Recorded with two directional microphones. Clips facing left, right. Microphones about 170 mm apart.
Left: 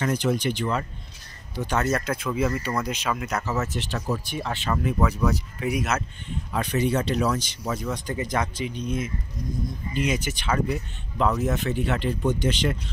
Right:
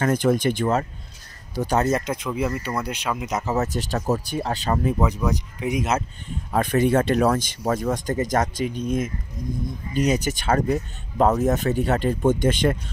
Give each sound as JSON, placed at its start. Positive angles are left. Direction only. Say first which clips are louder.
{"t": 0.0, "sound": "speech", "louder": "right 4 dB", "side_deg": -50}
{"t": 2.0, "sound": "speech", "louder": "even", "side_deg": -15}
{"t": 3.4, "sound": "speech", "louder": "right 4 dB", "side_deg": -35}
{"t": 4.9, "sound": "speech", "louder": "right 1 dB", "side_deg": -20}
{"t": 6.5, "sound": "speech", "louder": "right 5 dB", "side_deg": -50}